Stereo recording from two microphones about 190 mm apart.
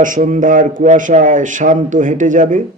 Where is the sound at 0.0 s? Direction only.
45° right (ahead or behind).